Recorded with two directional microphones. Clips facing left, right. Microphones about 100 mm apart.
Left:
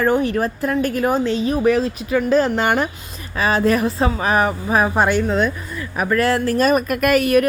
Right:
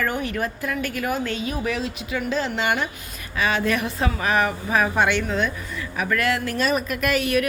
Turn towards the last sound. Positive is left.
turn(degrees=45)  # may be behind; listen again after turning